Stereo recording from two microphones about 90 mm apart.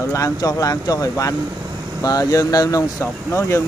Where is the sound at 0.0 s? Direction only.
35° left (ahead or behind).